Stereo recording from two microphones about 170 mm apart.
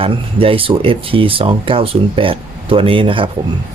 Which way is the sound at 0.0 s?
30° right (ahead or behind).